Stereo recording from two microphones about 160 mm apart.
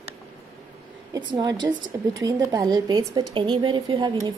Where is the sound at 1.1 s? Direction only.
25° right (ahead or behind).